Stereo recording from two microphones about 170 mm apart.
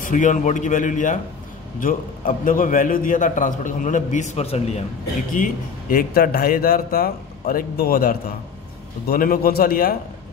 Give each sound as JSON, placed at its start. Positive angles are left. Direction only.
{"t": 0.0, "sound": "a man's voice", "side_deg": 50}
{"t": 5.3, "sound": "speech", "side_deg": 55}